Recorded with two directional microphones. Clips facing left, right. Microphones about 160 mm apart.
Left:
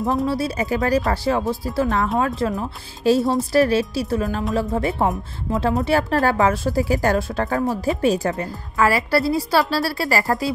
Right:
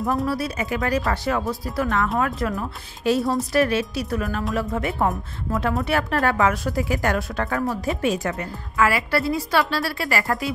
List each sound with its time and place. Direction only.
0.2 s a woman's voice: 25° left (ahead or behind)